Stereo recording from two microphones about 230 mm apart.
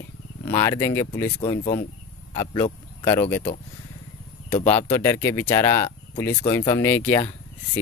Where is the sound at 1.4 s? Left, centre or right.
Left.